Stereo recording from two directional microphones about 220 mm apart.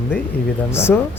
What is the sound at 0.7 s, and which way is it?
Speech, 10° left (ahead or behind).